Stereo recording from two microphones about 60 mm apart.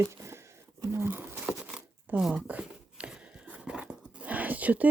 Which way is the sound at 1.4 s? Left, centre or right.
Centre.